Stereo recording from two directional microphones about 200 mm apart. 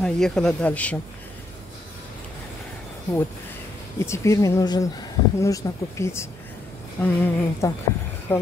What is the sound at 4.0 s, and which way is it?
Speech, 15° left (ahead or behind).